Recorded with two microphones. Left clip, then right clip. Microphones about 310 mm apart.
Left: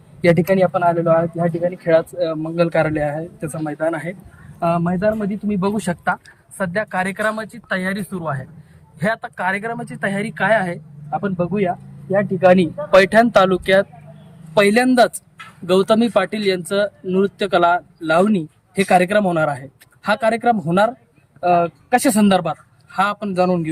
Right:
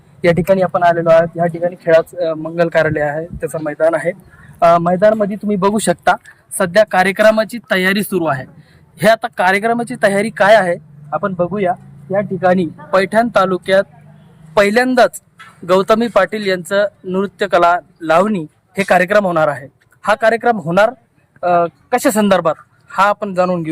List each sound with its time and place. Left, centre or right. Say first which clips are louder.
0.2 s speech: right 2 dB; centre
12.1 s speech: even; centre